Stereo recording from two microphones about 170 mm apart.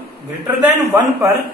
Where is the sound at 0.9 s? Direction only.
10° right (ahead or behind).